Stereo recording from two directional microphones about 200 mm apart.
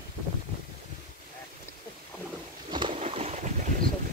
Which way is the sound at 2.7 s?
25° right (ahead or behind).